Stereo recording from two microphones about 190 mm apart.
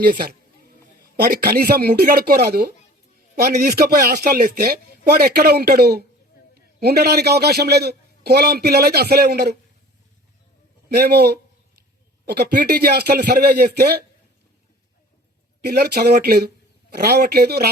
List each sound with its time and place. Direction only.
1.1 s a man's voice: 55° right (ahead or behind)
10.8 s a man's voice: 55° right (ahead or behind)
15.6 s a man's voice: 60° right (ahead or behind)